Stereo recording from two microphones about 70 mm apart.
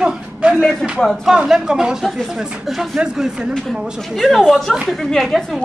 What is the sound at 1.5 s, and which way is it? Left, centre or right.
A man's voice, centre.